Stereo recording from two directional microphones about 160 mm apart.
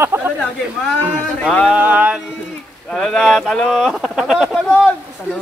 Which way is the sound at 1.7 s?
10° right (ahead or behind).